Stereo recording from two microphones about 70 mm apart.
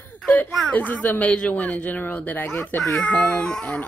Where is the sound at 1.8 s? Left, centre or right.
Left.